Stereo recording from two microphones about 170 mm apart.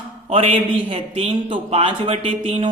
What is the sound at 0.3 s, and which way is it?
Speech, 35° right (ahead or behind).